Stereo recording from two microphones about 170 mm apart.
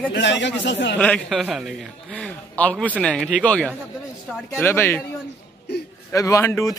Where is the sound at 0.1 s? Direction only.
90° left.